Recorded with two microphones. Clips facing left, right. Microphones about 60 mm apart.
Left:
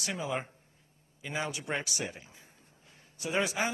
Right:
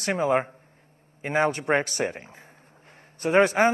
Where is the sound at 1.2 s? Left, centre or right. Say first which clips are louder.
Right 12 dB; right.